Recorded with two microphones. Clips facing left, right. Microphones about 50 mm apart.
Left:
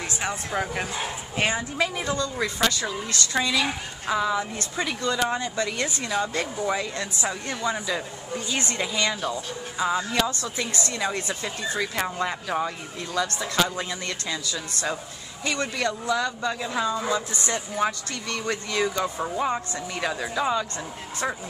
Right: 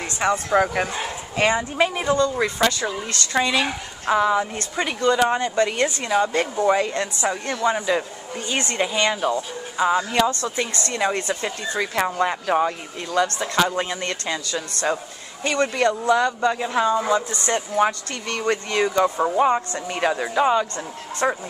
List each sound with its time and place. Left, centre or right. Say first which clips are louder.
0.0 s speech: right 7 dB; right
2.3 s speech: right 4 dB; right
6.0 s speech: right 6 dB; centre
6.5 s speech: right 7 dB; right
10.4 s speech: right 4 dB; right
11.8 s speech: right 7 dB; right